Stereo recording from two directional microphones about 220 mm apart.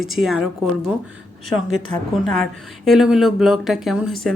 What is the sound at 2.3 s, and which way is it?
Speech, centre (ahead or behind).